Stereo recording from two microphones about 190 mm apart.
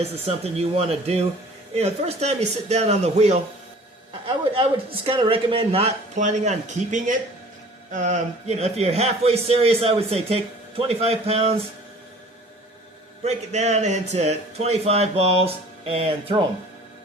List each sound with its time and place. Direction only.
0.0 s a man's voice: 35° right (ahead or behind)
13.2 s a man's voice: 35° right (ahead or behind)